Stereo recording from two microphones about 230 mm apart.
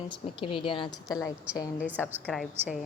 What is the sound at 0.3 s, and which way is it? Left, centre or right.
A woman's voice, left.